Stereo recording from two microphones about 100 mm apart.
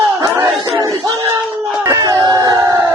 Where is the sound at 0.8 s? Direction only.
45° right (ahead or behind).